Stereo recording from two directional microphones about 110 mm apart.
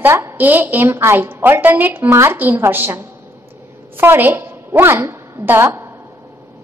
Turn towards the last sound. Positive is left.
turn(degrees=-25)  # may be behind; listen again after turning